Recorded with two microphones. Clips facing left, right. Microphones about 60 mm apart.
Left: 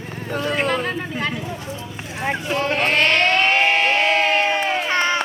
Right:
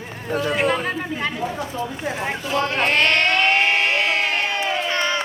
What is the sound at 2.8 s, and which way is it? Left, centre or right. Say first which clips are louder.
Crowd: left 1 dB; centre.